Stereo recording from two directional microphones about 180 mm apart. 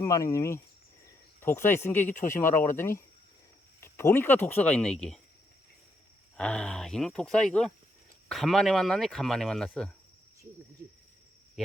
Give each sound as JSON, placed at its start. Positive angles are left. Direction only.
{"t": 0.0, "sound": "speech", "side_deg": 15}
{"t": 6.3, "sound": "speech", "side_deg": 5}